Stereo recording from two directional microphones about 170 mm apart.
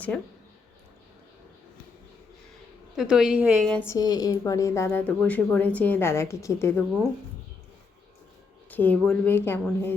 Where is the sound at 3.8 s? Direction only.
20° left (ahead or behind).